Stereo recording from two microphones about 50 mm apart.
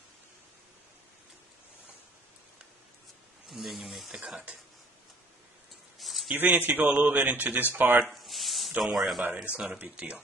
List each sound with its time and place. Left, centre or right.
3.4 s speech: centre
5.9 s a sound: centre
6.3 s speech: right
8.1 s a sound: centre
8.8 s speech: centre
9.3 s speech: right